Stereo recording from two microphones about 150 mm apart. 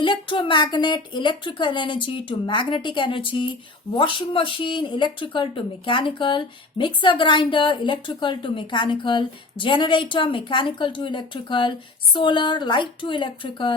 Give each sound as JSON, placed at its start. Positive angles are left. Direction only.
{"t": 0.0, "sound": "speech", "side_deg": 30}